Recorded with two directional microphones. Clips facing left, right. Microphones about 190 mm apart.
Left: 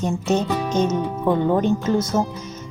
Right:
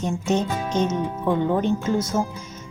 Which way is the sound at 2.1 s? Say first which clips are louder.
Left 3 dB; 60° left (ahead or behind).